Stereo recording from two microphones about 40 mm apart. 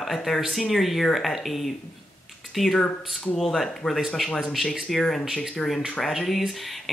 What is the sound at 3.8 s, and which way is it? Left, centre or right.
Speech, centre.